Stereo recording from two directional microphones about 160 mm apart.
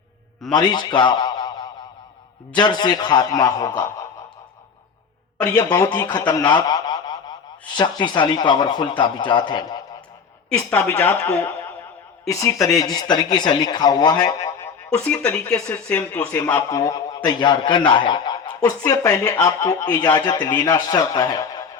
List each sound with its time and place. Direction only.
0.5 s a man's voice: 25° left (ahead or behind)
5.4 s a man's voice: 20° left (ahead or behind)
10.6 s speech: 15° left (ahead or behind)
12.6 s a man's voice: 25° left (ahead or behind)
14.9 s a man's voice: 5° left (ahead or behind); by 21.6 s 25° left (ahead or behind)